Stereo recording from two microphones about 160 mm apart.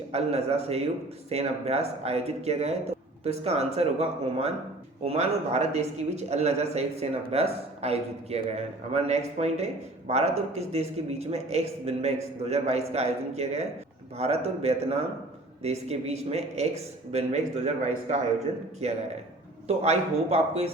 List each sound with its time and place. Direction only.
0.1 s speech: 40° right (ahead or behind)
18.8 s speech: 40° right (ahead or behind)